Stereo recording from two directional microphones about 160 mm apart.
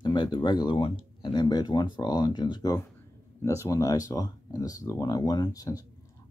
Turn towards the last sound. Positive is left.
turn(degrees=20)  # may be behind; listen again after turning